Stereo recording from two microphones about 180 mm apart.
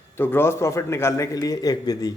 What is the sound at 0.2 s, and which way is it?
A man's voice, 10° left (ahead or behind).